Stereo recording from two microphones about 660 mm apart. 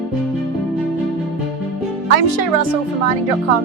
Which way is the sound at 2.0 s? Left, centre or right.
Right.